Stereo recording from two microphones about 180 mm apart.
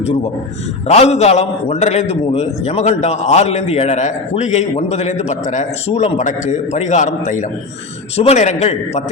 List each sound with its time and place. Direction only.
0.0 s a man's voice: 35° left (ahead or behind)